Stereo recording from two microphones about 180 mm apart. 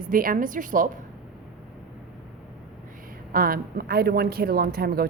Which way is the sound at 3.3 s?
55° right (ahead or behind).